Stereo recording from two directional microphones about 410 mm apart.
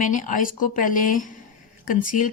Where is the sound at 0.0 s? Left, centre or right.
Centre.